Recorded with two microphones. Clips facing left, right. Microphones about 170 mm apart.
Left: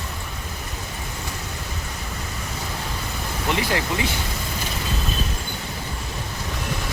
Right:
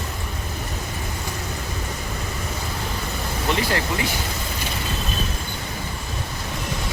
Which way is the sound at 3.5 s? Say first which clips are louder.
Even; 15° left (ahead or behind).